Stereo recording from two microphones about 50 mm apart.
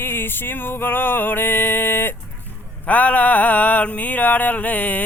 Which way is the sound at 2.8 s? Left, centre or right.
Left.